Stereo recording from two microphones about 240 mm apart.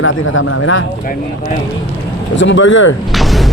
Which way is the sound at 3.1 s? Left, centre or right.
Centre.